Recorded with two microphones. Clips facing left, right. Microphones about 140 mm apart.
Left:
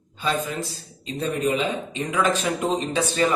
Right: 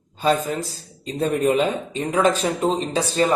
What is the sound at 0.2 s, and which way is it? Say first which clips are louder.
A man's voice: right 5 dB; 40° right (ahead or behind).